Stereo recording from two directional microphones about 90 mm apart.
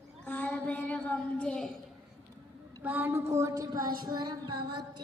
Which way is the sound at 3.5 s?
45° right (ahead or behind).